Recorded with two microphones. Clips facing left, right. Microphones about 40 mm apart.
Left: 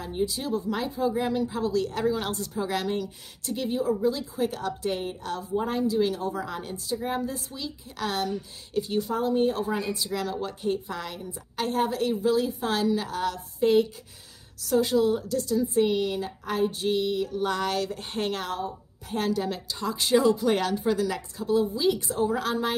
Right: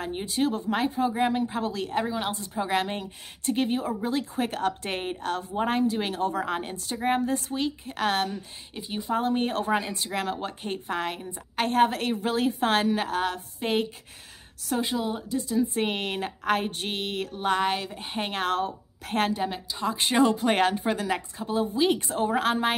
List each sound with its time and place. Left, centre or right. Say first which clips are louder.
0.0 s speech: right 2 dB; right
2.0 s speech: left 3 dB; centre; by 8.5 s right
8.7 s speech: left 7 dB; centre
9.1 s speech: even; right
14.8 s speech: left 7 dB; centre
15.6 s speech: left 4 dB; right; by 18.3 s centre
18.3 s speech: right 4 dB; right
19.3 s speech: even; right
19.9 s speech: left 1 dB; right